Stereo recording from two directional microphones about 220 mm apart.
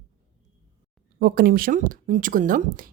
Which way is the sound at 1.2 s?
40° right (ahead or behind).